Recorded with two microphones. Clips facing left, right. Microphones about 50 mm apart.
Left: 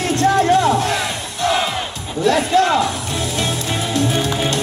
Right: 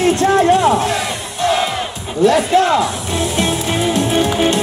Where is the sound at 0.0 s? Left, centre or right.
Centre.